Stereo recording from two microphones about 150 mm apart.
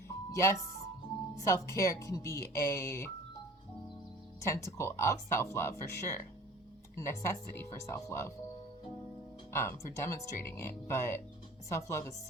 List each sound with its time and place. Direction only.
0.3 s speech: 20° left (ahead or behind)
4.4 s speech: 20° left (ahead or behind)
9.5 s speech: 15° left (ahead or behind)